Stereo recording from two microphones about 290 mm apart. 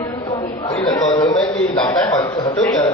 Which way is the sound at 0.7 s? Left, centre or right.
Centre.